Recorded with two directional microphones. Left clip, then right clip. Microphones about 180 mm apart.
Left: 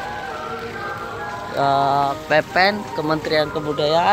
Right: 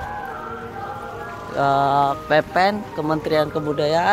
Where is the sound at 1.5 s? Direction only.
25° right (ahead or behind).